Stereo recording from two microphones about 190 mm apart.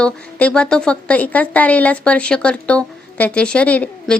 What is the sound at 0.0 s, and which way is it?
A woman's voice, 5° left (ahead or behind).